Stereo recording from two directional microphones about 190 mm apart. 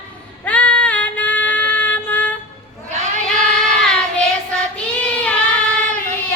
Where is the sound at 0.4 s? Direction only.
5° left (ahead or behind).